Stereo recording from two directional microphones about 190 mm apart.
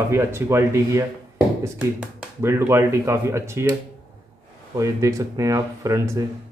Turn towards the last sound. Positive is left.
turn(degrees=-15)  # may be behind; listen again after turning